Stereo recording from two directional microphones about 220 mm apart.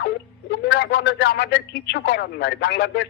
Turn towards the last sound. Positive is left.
turn(degrees=50)  # may be behind; listen again after turning